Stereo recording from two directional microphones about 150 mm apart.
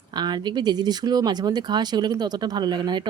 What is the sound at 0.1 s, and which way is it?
A woman's voice, 30° right (ahead or behind).